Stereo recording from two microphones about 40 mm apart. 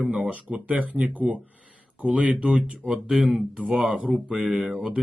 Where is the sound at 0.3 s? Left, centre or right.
Right.